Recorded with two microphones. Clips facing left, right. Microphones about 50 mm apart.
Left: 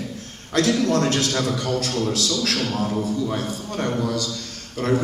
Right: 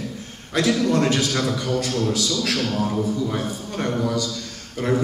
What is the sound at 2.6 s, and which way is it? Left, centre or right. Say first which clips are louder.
Speech: right 1 dB; centre.